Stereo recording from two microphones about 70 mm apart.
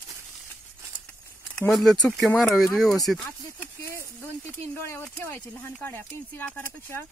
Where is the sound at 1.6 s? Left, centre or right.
Centre.